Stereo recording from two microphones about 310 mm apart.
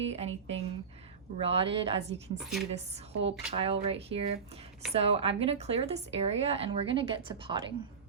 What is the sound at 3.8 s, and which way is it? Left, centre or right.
A woman's voice, centre.